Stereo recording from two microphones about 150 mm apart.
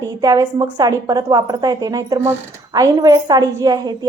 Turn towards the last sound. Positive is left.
turn(degrees=-25)  # may be behind; listen again after turning